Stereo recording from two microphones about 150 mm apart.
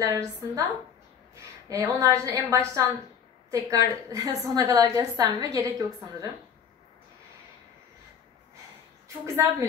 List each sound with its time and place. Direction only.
0.0 s a woman's voice: 20° right (ahead or behind)
9.2 s a woman's voice: 20° right (ahead or behind)